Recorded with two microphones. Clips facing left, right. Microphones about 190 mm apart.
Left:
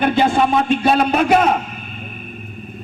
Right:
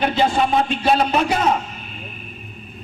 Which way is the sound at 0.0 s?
50° left (ahead or behind).